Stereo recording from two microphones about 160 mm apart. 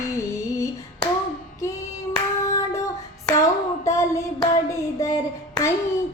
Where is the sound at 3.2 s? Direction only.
20° left (ahead or behind).